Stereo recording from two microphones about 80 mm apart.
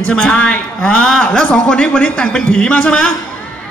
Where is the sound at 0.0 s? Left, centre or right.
Centre.